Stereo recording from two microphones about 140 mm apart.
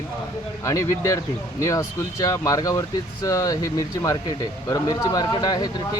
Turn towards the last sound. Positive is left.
turn(degrees=30)  # may be behind; listen again after turning